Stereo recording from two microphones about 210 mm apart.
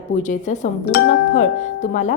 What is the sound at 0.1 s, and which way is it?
Speech, 35° left (ahead or behind).